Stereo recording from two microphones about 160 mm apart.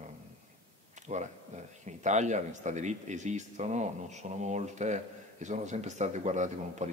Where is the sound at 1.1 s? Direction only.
45° right (ahead or behind).